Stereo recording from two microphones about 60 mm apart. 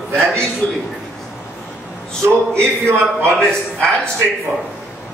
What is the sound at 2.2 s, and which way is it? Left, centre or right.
A man's voice, right.